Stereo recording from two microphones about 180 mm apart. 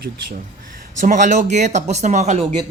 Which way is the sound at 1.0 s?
45° right (ahead or behind).